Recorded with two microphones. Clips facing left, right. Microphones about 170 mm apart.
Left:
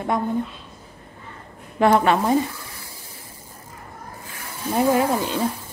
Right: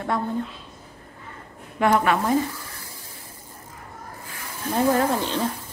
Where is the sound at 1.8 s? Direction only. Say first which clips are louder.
Left 3 dB; 30° left (ahead or behind).